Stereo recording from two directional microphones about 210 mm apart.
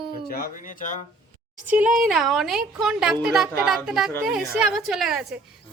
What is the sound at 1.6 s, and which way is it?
A woman's voice, 5° right (ahead or behind).